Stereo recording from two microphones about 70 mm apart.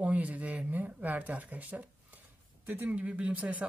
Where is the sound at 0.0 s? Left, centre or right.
Right.